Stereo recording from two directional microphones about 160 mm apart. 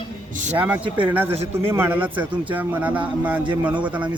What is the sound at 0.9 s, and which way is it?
A man's voice, 10° right (ahead or behind).